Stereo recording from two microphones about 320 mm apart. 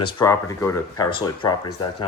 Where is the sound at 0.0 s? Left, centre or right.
Centre.